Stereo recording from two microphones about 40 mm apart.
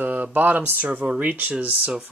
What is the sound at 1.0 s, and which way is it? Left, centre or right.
Speech, right.